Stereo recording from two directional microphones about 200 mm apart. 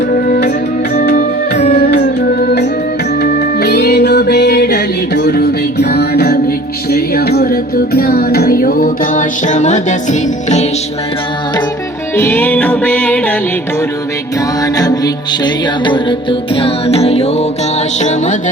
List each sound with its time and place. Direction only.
0.1 s music: 50° left (ahead or behind)
3.2 s music: 50° left (ahead or behind); by 10.7 s 35° left (ahead or behind)
12.1 s music: 10° left (ahead or behind)
14.6 s music: 20° left (ahead or behind); by 18.3 s 35° left (ahead or behind)